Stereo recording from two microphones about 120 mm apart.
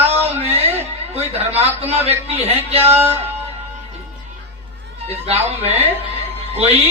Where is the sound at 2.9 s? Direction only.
20° right (ahead or behind).